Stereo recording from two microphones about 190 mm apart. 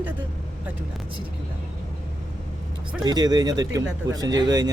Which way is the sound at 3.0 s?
20° right (ahead or behind).